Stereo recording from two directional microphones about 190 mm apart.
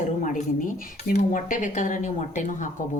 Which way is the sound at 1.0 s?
45° left (ahead or behind).